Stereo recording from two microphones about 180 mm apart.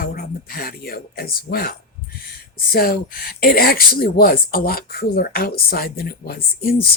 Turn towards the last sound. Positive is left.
turn(degrees=55)  # may be behind; listen again after turning